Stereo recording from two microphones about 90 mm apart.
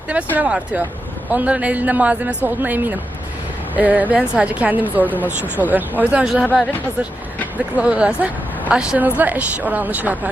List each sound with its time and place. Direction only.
0.3 s a man's voice: 15° right (ahead or behind)
6.2 s speech: 5° right (ahead or behind)
7.8 s a man's voice: 15° right (ahead or behind)